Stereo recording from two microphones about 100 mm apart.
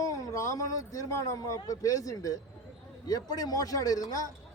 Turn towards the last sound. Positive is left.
turn(degrees=40)  # may be behind; listen again after turning